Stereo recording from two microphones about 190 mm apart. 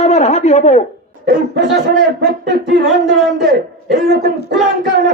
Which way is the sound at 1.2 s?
60° right (ahead or behind).